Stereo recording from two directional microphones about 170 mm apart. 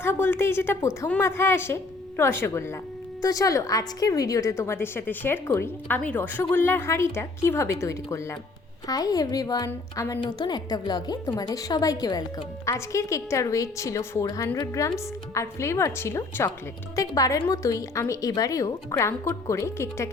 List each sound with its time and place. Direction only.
0.0 s a woman's voice: 15° left (ahead or behind)